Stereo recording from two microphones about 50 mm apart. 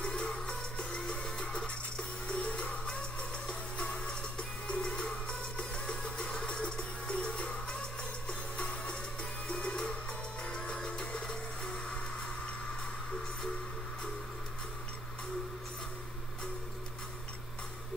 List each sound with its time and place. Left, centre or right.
0.0 s music: centre